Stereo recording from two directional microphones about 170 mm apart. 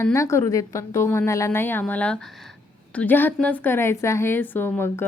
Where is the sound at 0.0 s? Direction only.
15° left (ahead or behind).